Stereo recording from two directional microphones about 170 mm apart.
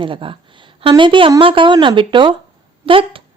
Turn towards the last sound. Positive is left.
turn(degrees=-30)  # may be behind; listen again after turning